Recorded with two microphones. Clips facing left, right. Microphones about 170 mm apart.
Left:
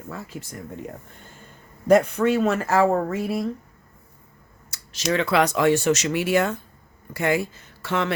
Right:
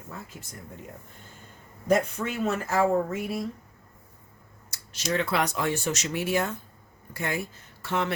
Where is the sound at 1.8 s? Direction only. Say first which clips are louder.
Left 7 dB; 75° left (ahead or behind).